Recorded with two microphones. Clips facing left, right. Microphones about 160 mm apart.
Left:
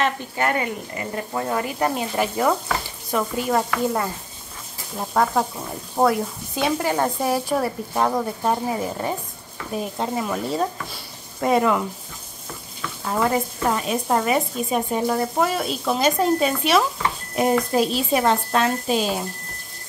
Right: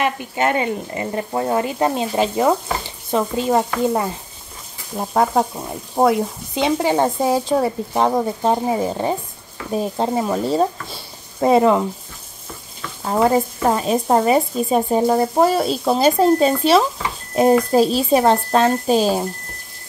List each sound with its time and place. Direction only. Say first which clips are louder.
0.0 s speech: right 3 dB; 15° right (ahead or behind)
13.0 s speech: right 5 dB; 30° right (ahead or behind)